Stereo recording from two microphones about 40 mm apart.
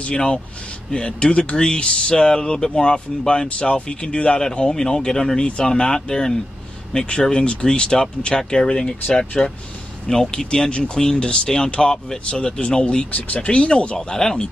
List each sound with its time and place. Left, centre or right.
0.1 s speech: centre
13.1 s speech: left
13.9 s speech: centre